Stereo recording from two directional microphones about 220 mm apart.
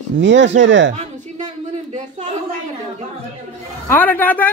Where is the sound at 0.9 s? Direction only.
30° right (ahead or behind).